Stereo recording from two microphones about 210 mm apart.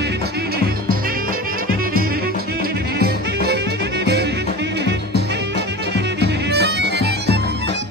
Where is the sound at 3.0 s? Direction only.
50° right (ahead or behind).